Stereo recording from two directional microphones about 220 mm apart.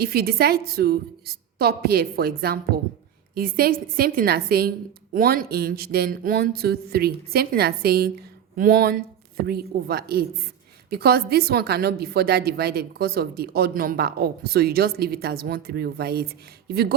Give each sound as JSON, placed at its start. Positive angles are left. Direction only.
{"t": 0.0, "sound": "a woman's voice", "side_deg": -45}